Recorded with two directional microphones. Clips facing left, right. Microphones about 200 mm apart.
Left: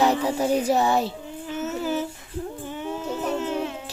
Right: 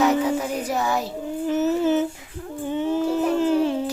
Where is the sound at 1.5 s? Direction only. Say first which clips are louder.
Right 8 dB; 40° right (ahead or behind).